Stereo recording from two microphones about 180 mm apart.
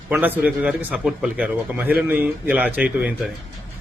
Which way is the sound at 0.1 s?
10° right (ahead or behind).